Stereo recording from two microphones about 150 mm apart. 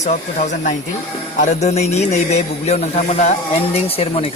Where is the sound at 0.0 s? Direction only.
50° left (ahead or behind).